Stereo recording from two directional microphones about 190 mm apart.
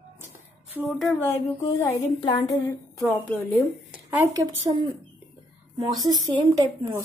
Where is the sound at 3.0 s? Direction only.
10° left (ahead or behind).